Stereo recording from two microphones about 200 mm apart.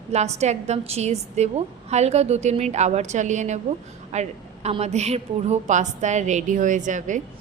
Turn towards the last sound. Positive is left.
turn(degrees=-40)  # may be behind; listen again after turning